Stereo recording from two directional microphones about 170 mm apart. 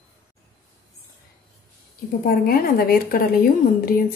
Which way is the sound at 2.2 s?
60° left (ahead or behind).